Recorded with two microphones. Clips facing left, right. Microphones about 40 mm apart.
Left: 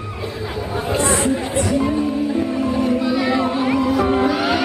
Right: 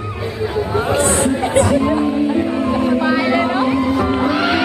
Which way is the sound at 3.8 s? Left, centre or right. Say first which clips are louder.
Even; centre.